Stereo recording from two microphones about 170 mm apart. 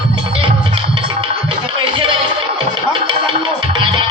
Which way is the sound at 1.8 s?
30° right (ahead or behind).